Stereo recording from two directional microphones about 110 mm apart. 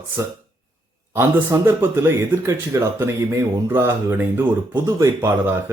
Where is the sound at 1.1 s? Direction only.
20° right (ahead or behind).